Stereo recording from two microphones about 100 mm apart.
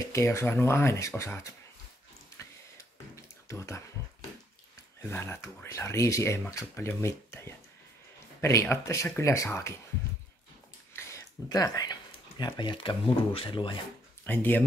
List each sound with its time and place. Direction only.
0.1 s speech: 30° left (ahead or behind)
2.3 s a sound: 30° left (ahead or behind)
3.4 s speech: 30° left (ahead or behind)
5.1 s speech: 25° left (ahead or behind)
10.9 s a sound: 25° left (ahead or behind)
11.4 s speech: 40° left (ahead or behind); by 13.7 s 55° left (ahead or behind)
14.2 s speech: 20° left (ahead or behind)